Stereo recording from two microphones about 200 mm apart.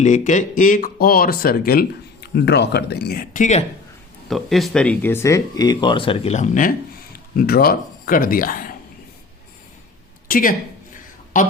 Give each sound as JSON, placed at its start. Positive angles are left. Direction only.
{"t": 0.0, "sound": "speech", "side_deg": 40}
{"t": 4.3, "sound": "speech", "side_deg": 0}
{"t": 10.2, "sound": "speech", "side_deg": 45}